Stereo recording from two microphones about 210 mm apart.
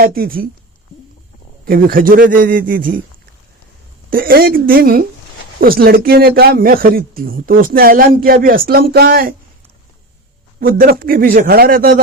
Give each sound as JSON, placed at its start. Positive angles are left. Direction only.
{"t": 0.0, "sound": "speech", "side_deg": -45}
{"t": 1.6, "sound": "a man's voice", "side_deg": -45}
{"t": 4.1, "sound": "speech", "side_deg": -45}
{"t": 10.6, "sound": "speech", "side_deg": -45}